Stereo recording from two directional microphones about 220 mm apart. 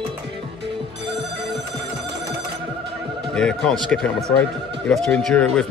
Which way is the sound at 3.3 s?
5° left (ahead or behind).